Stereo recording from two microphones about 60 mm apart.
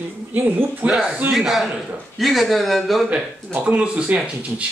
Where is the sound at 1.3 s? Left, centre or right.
Centre.